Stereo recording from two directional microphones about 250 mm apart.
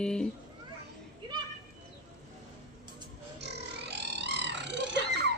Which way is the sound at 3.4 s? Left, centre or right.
Right.